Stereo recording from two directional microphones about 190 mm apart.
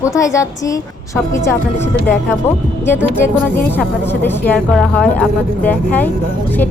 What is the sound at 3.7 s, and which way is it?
Speech, 10° left (ahead or behind).